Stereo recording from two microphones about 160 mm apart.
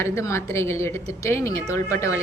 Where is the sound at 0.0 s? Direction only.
15° left (ahead or behind).